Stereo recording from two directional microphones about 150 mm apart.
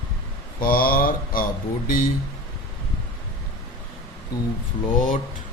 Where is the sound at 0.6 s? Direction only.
75° left (ahead or behind).